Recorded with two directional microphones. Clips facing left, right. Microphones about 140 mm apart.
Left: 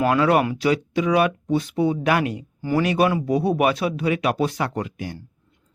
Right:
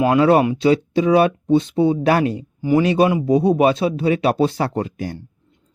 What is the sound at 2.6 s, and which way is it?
A man's voice, 20° right (ahead or behind).